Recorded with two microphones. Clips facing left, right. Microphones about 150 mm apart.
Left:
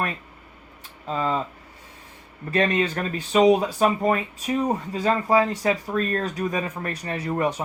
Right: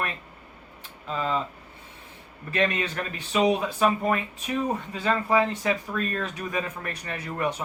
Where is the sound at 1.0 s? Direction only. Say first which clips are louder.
Left 3 dB; 30° left (ahead or behind).